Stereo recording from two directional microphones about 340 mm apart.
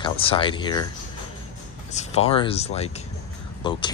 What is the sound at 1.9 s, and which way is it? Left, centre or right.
Speech, centre.